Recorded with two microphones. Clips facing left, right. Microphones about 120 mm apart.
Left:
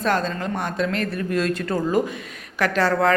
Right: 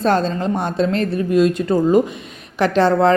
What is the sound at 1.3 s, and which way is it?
A woman's voice, 20° right (ahead or behind).